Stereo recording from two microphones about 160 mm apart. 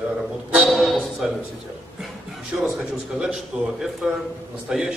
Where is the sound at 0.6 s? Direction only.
Centre (ahead or behind).